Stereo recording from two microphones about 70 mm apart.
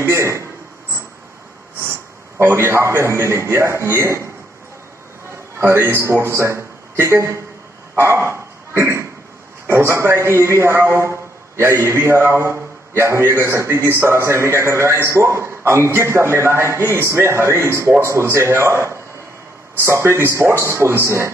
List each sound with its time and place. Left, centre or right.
0.0 s a man's voice: right
1.8 s a man's voice: right
5.6 s a man's voice: right
7.9 s dog: right
9.7 s a man's voice: right